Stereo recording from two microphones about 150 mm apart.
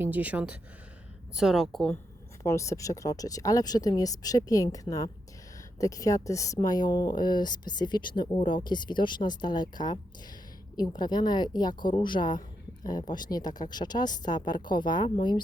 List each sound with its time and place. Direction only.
0.0 s speech: 10° right (ahead or behind)
2.4 s speech: 20° left (ahead or behind)